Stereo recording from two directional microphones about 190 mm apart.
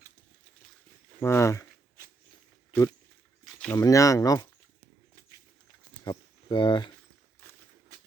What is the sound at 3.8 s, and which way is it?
Speech, 15° left (ahead or behind).